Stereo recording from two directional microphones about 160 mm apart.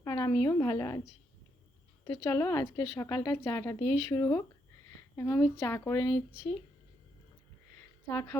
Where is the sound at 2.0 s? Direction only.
15° left (ahead or behind).